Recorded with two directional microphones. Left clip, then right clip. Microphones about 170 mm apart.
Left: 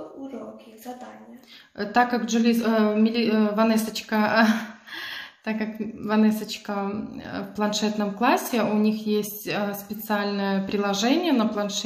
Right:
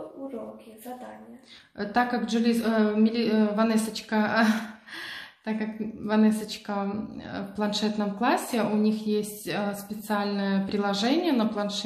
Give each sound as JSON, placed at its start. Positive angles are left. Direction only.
{"t": 1.8, "sound": "speech", "side_deg": 15}